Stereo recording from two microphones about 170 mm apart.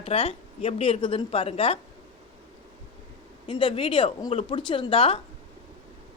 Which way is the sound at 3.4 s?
30° left (ahead or behind).